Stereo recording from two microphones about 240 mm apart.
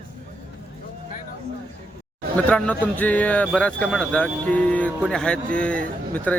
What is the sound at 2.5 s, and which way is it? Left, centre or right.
Speech, centre.